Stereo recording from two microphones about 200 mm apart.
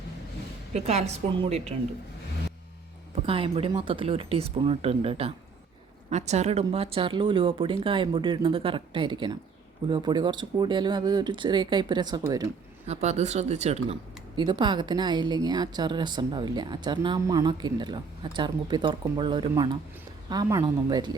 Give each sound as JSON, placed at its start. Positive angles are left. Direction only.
{"t": 0.7, "sound": "a woman's voice", "side_deg": -35}
{"t": 3.2, "sound": "speech", "side_deg": -25}
{"t": 12.9, "sound": "a woman's voice", "side_deg": -35}